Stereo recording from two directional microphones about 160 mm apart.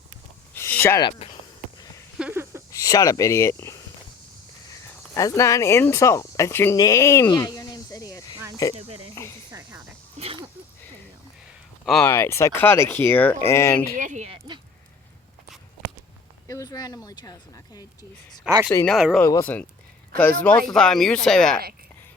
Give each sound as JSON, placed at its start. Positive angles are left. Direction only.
{"t": 0.5, "sound": "a sound", "side_deg": 15}
{"t": 2.1, "sound": "a sound", "side_deg": -10}
{"t": 2.7, "sound": "speech", "side_deg": 20}
{"t": 5.1, "sound": "speech", "side_deg": 20}
{"t": 8.7, "sound": "speech", "side_deg": -40}
{"t": 9.5, "sound": "cricket", "side_deg": -20}
{"t": 10.2, "sound": "a sound", "side_deg": -35}
{"t": 12.0, "sound": "speech", "side_deg": 15}
{"t": 13.9, "sound": "speech", "side_deg": -50}
{"t": 16.5, "sound": "speech", "side_deg": 25}
{"t": 18.5, "sound": "speech", "side_deg": -5}
{"t": 19.2, "sound": "speech", "side_deg": 15}